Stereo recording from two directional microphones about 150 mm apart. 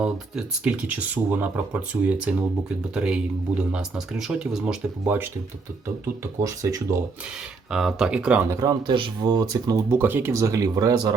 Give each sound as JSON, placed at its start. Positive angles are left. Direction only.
{"t": 0.0, "sound": "speech", "side_deg": -5}
{"t": 6.4, "sound": "speech", "side_deg": -20}
{"t": 7.7, "sound": "speech", "side_deg": -5}
{"t": 8.4, "sound": "speech", "side_deg": -25}